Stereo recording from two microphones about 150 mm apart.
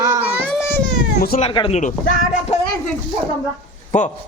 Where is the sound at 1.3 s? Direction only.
70° left (ahead or behind).